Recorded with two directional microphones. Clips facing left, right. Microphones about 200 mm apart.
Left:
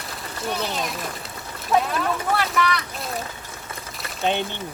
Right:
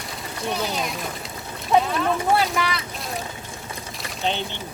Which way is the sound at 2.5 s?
25° right (ahead or behind).